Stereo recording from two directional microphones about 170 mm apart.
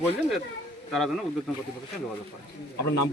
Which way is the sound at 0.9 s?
Centre (ahead or behind).